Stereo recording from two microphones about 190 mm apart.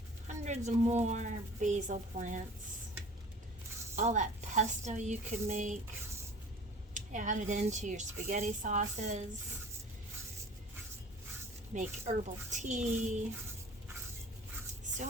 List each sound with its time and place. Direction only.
0.3 s a woman's voice: 40° right (ahead or behind)
3.9 s a woman's voice: 40° right (ahead or behind)
6.9 s a woman's voice: 40° right (ahead or behind)
11.7 s a woman's voice: 40° right (ahead or behind)